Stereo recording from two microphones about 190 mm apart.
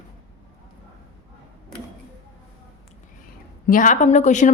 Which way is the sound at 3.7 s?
45° left (ahead or behind).